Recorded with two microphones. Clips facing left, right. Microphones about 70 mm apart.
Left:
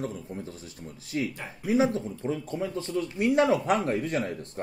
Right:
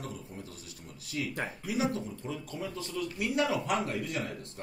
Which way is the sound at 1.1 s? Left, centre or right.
Left.